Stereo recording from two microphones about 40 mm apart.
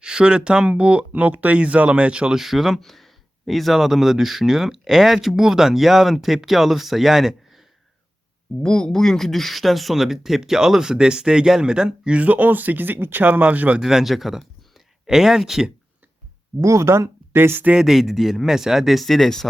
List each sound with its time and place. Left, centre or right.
0.0 s speech: right
2.3 s speech: centre
8.6 s speech: centre; by 12.2 s right
12.2 s speech: right
13.4 s speech: right
13.8 s speech: centre
16.9 s speech: right
17.9 s speech: centre
19.0 s speech: centre